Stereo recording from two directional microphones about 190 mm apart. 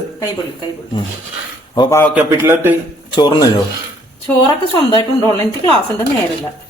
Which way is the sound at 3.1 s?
20° left (ahead or behind).